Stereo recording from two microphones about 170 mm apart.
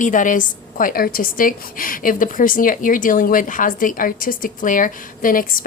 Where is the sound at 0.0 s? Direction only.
50° left (ahead or behind).